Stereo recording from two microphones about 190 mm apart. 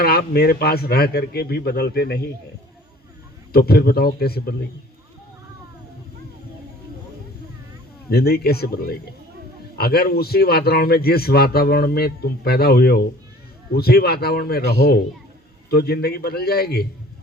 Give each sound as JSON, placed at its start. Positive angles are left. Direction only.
{"t": 0.0, "sound": "a man's voice", "side_deg": 55}
{"t": 3.5, "sound": "a man's voice", "side_deg": 55}
{"t": 8.1, "sound": "a man's voice", "side_deg": 55}